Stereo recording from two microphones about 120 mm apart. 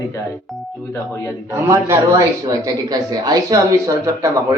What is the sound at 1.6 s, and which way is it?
Speech, 25° right (ahead or behind).